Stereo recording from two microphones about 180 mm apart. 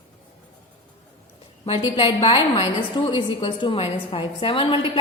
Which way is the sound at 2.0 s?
30° left (ahead or behind).